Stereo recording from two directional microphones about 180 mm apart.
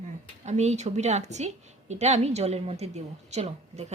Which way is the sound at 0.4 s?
40° right (ahead or behind).